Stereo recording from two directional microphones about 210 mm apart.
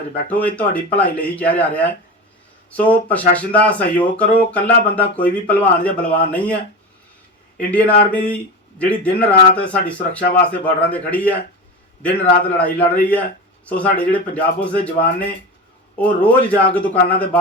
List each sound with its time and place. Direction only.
0.3 s speech: 5° left (ahead or behind)
7.6 s speech: 5° left (ahead or behind)
12.5 s speech: 5° left (ahead or behind)
16.0 s speech: 5° left (ahead or behind)